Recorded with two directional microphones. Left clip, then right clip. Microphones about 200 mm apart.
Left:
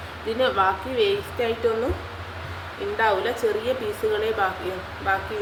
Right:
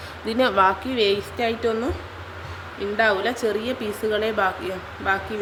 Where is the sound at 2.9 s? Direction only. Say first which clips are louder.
Right 1 dB; 55° right (ahead or behind).